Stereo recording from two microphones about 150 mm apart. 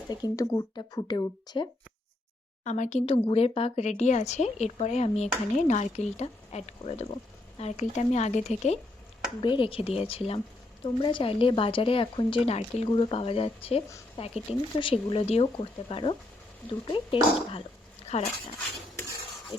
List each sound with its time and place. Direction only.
0.1 s speech: 25° left (ahead or behind)
2.6 s a woman's voice: 50° left (ahead or behind)
3.1 s a woman's voice: 40° left (ahead or behind)
9.4 s speech: 35° left (ahead or behind)